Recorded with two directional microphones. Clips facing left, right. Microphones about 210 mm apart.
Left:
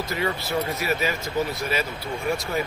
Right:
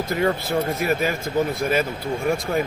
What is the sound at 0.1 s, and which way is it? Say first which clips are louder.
Speech: right 6 dB; 50° right (ahead or behind).